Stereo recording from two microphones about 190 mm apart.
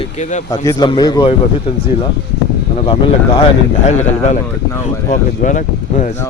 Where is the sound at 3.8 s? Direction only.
40° left (ahead or behind).